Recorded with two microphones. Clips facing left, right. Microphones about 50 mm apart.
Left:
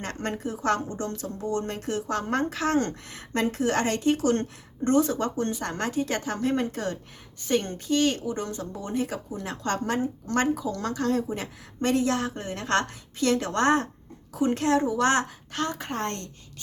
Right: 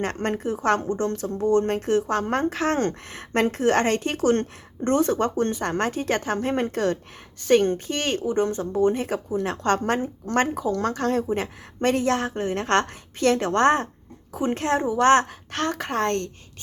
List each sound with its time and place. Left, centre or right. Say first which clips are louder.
0.0 s a woman's voice: right 5 dB; right
6.7 s a woman's voice: right 7 dB; right
7.6 s a woman's voice: right 1 dB; right